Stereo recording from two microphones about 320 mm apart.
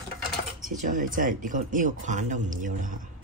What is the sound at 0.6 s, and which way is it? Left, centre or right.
Speech, right.